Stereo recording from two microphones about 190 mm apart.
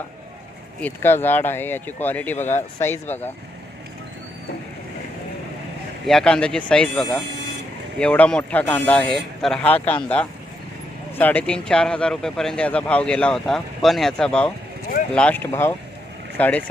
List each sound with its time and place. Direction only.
0.8 s speech: 10° left (ahead or behind)
2.5 s speech: 40° left (ahead or behind)
2.8 s speech: 10° left (ahead or behind)
6.1 s speech: 5° left (ahead or behind)